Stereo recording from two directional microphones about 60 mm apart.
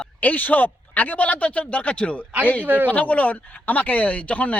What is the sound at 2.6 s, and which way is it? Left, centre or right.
Speech, right.